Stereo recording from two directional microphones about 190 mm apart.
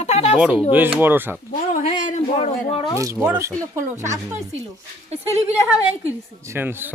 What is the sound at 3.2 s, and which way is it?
Speech, 10° right (ahead or behind).